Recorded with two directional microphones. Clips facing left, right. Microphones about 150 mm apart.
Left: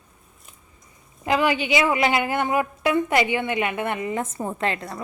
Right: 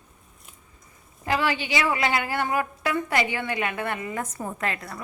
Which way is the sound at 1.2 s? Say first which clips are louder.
Left 4 dB; 20° left (ahead or behind).